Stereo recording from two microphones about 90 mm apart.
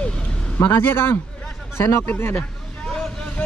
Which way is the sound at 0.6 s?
25° left (ahead or behind).